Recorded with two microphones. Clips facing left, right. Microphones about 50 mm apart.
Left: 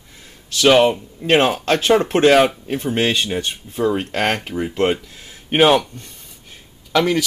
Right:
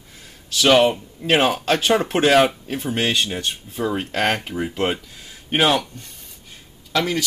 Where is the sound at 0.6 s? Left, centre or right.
Centre.